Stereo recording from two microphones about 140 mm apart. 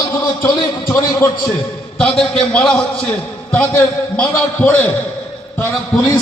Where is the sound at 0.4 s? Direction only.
25° left (ahead or behind).